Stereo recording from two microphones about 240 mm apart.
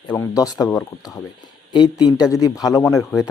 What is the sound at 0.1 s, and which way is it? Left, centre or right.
Speech, centre.